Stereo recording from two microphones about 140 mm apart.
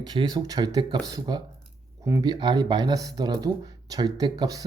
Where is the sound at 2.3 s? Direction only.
30° right (ahead or behind).